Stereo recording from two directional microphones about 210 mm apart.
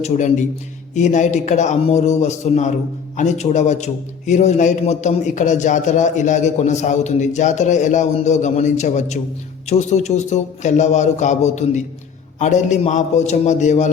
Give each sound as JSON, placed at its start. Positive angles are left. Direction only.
{"t": 0.0, "sound": "a man's voice", "side_deg": 35}